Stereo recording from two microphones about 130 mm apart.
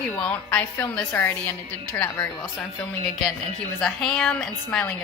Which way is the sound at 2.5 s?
5° left (ahead or behind).